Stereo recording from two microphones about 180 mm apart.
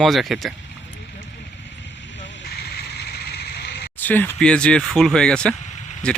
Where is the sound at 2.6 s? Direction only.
65° left (ahead or behind).